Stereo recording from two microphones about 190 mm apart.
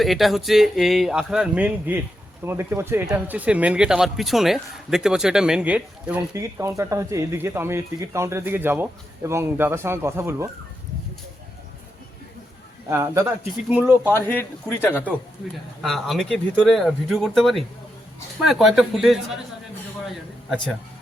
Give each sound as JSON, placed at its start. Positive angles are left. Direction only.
{"t": 0.0, "sound": "speech", "side_deg": 0}
{"t": 12.9, "sound": "speech", "side_deg": -15}
{"t": 14.2, "sound": "a man's voice", "side_deg": 10}